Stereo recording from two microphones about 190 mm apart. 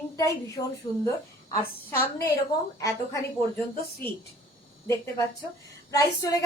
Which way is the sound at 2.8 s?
15° left (ahead or behind).